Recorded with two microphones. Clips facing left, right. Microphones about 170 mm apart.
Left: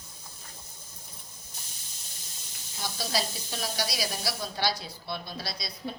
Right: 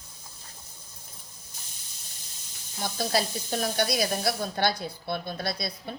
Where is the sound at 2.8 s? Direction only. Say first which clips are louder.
Right 4 dB; 50° right (ahead or behind).